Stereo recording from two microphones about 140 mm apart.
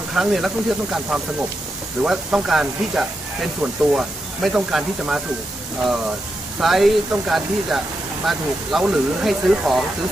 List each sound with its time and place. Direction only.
0.1 s speech: 5° right (ahead or behind)
6.6 s speech: centre (ahead or behind)